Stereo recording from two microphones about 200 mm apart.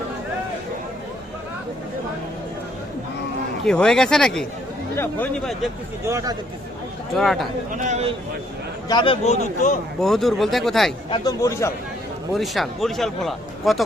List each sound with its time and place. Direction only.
3.7 s a man's voice: 5° left (ahead or behind)
6.1 s speech: 15° right (ahead or behind)
7.2 s a man's voice: centre (ahead or behind)
7.7 s speech: 35° right (ahead or behind)
8.9 s a man's voice: 25° left (ahead or behind)
10.0 s a man's voice: centre (ahead or behind)
11.1 s speech: 15° left (ahead or behind)
12.3 s a man's voice: centre (ahead or behind)